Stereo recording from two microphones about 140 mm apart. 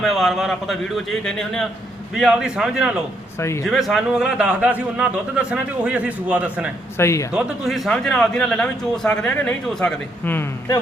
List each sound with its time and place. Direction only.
0.0 s a man's voice: centre (ahead or behind)
6.9 s speech: 20° left (ahead or behind)
7.3 s a man's voice: centre (ahead or behind); by 10.8 s 15° left (ahead or behind)